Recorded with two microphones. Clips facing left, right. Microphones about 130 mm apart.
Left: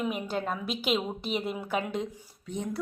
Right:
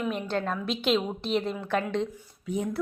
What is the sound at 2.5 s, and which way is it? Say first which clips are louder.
Speech: right 4 dB; 5° right (ahead or behind).